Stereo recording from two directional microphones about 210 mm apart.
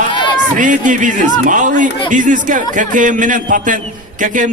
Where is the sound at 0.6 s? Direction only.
40° right (ahead or behind).